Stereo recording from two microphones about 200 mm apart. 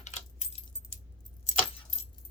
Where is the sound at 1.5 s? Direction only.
35° left (ahead or behind).